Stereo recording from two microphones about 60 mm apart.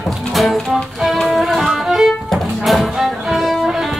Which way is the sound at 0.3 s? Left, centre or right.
Centre.